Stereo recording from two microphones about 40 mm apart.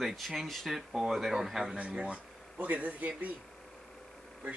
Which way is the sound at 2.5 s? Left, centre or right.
Right.